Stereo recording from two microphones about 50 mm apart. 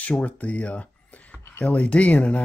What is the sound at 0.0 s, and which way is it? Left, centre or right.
Speech, left.